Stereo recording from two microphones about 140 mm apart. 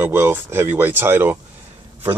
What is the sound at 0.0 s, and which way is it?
Speech, 15° right (ahead or behind).